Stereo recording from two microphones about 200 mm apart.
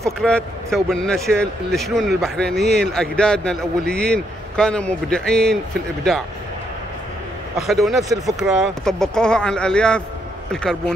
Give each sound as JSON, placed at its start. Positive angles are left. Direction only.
{"t": 0.2, "sound": "a man's voice", "side_deg": 5}
{"t": 7.5, "sound": "a man's voice", "side_deg": 0}
{"t": 8.0, "sound": "speech", "side_deg": -15}
{"t": 8.4, "sound": "a man's voice", "side_deg": 0}